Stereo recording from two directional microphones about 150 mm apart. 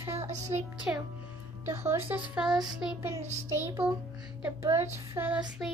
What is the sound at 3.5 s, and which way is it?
A woman's voice, 15° right (ahead or behind).